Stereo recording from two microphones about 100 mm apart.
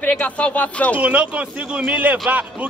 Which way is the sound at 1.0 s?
15° right (ahead or behind).